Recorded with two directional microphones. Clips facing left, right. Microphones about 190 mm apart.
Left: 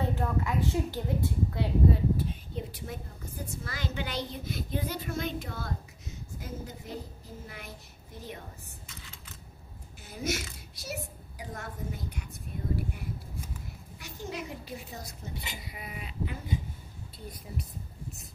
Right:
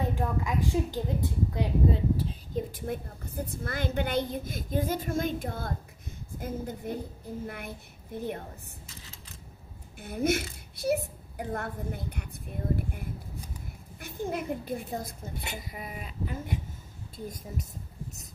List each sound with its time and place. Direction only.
0.1 s a woman's voice: 15° right (ahead or behind)
2.5 s a woman's voice: 50° right (ahead or behind)
9.9 s a woman's voice: 55° right (ahead or behind)